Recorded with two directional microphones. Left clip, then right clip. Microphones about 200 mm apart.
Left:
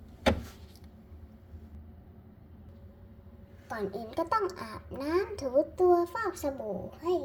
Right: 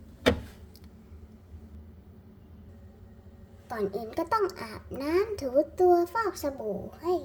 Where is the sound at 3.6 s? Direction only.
15° right (ahead or behind).